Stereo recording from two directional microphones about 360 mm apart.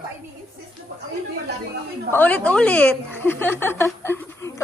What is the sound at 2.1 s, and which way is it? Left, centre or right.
Speech, centre.